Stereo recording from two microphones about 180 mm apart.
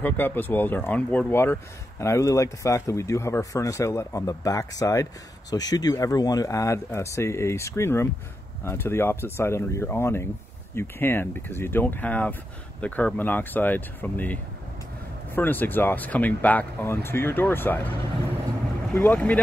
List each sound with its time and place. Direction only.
0.0 s speech: 10° left (ahead or behind)
18.9 s speech: 10° left (ahead or behind)